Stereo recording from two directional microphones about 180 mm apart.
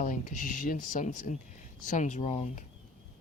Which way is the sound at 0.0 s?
45° left (ahead or behind).